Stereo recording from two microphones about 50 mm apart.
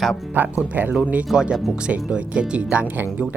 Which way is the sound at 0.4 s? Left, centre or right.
Right.